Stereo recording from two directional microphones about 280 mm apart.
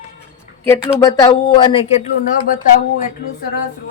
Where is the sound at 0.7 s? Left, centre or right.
Centre.